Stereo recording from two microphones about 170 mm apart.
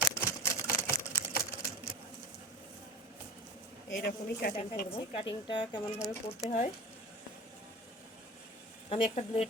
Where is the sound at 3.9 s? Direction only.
60° left (ahead or behind).